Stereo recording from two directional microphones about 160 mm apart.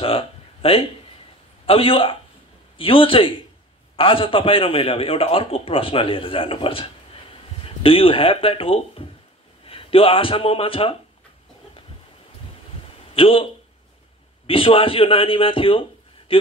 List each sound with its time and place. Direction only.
0.0 s a man's voice: 35° left (ahead or behind)
13.1 s a man's voice: 35° left (ahead or behind)